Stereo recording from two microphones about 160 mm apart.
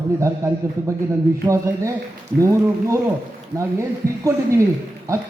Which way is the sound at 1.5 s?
20° right (ahead or behind).